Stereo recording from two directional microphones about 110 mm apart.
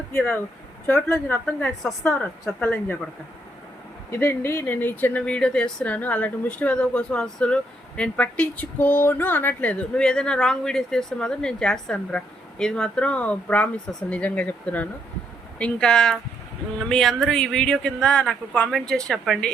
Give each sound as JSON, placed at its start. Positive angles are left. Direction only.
{"t": 0.1, "sound": "speech", "side_deg": 15}
{"t": 0.9, "sound": "speech", "side_deg": 5}
{"t": 1.1, "sound": "speech", "side_deg": 15}
{"t": 2.6, "sound": "speech", "side_deg": 15}
{"t": 4.1, "sound": "speech", "side_deg": 25}